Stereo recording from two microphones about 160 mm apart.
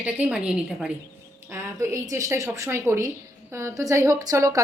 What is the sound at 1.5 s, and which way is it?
A woman's voice, 15° right (ahead or behind).